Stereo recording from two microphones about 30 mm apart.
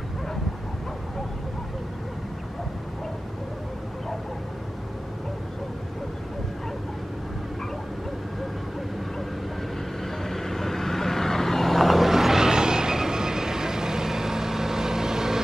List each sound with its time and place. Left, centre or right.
10.2 s vehicle: centre